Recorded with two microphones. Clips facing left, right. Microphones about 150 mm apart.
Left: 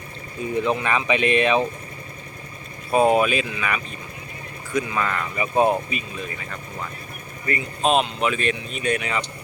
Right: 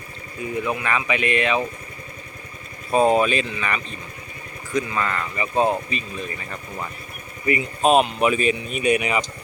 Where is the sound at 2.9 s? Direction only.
5° left (ahead or behind).